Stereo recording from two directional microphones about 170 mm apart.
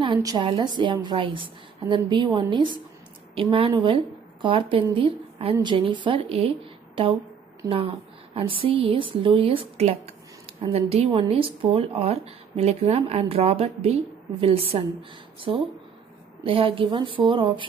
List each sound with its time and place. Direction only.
0.0 s a woman's voice: 25° right (ahead or behind)
8.4 s a woman's voice: 30° right (ahead or behind)
16.4 s a woman's voice: 30° right (ahead or behind)